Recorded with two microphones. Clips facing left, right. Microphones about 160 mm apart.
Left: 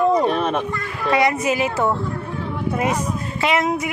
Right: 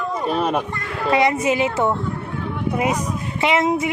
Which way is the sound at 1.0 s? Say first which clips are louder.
Right 1 dB; 20° right (ahead or behind).